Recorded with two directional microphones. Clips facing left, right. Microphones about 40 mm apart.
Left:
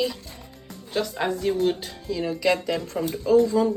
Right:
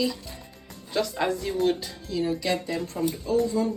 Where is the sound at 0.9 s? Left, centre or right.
Centre.